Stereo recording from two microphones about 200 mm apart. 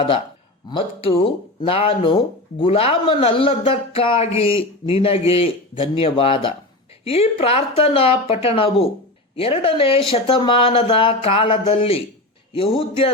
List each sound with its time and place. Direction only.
0.7 s speech: 25° left (ahead or behind)